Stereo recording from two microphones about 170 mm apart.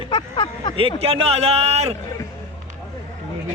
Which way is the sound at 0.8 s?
35° right (ahead or behind).